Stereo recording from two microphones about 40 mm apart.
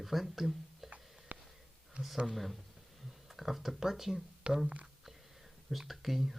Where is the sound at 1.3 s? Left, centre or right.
Right.